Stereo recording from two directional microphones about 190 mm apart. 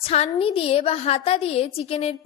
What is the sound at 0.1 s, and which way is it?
A woman's voice, 30° left (ahead or behind).